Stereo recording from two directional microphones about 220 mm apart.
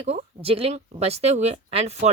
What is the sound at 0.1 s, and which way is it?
Speech, 25° right (ahead or behind).